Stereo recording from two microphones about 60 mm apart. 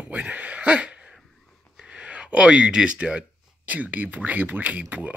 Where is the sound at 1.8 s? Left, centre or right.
Centre.